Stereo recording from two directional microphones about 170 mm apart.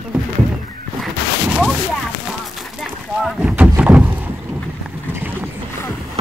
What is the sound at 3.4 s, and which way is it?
Boat, 10° right (ahead or behind).